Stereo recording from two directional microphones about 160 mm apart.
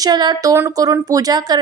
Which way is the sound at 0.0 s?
25° right (ahead or behind).